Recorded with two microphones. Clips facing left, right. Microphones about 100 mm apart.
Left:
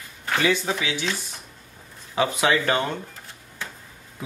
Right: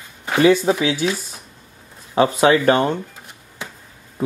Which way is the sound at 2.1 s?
35° right (ahead or behind).